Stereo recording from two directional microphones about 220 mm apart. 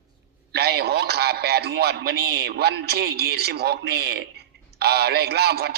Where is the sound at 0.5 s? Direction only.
45° right (ahead or behind).